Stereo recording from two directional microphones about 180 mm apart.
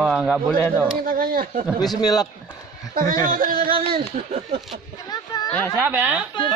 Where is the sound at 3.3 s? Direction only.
50° right (ahead or behind).